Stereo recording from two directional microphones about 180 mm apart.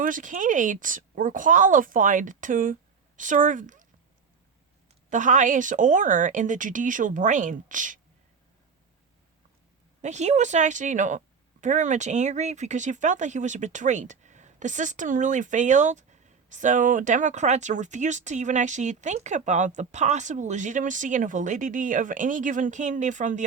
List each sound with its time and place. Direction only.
0.0 s speech: 45° right (ahead or behind)
5.0 s speech: 45° right (ahead or behind)
10.0 s speech: 40° right (ahead or behind)